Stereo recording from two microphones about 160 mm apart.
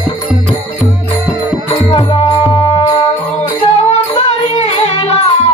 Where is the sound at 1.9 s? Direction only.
35° left (ahead or behind).